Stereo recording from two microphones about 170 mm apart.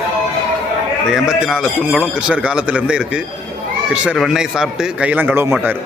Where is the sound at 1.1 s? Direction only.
5° right (ahead or behind).